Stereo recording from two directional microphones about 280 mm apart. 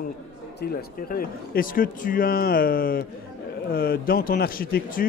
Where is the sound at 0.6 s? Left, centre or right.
Left.